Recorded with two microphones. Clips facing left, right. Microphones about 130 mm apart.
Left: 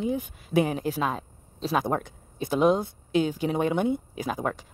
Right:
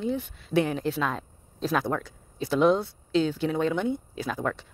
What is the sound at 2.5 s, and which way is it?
Speech, 45° left (ahead or behind).